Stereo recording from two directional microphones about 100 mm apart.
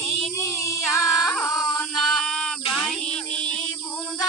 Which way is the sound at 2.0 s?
5° left (ahead or behind).